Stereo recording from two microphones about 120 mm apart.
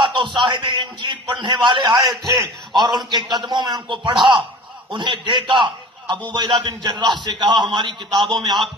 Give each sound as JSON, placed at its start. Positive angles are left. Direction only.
{"t": 0.0, "sound": "a man's voice", "side_deg": -40}